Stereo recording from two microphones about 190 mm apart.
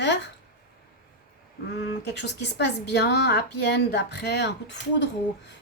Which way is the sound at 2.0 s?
60° left (ahead or behind).